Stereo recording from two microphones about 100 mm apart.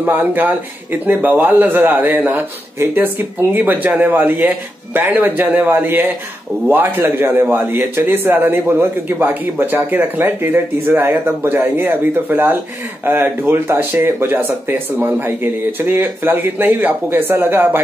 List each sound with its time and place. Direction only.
0.0 s a man's voice: 20° right (ahead or behind)